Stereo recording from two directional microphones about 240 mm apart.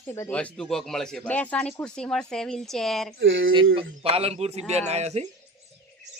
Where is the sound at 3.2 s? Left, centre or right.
Right.